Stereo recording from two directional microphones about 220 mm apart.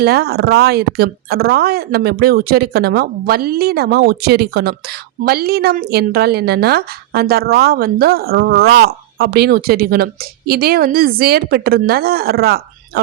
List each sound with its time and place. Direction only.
0.0 s speech: 45° right (ahead or behind)